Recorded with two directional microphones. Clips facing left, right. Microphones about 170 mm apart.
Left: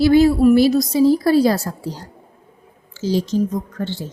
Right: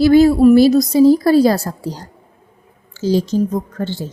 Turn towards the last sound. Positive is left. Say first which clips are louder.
# right 3 dB
turn(degrees=-50)  # may be behind; listen again after turning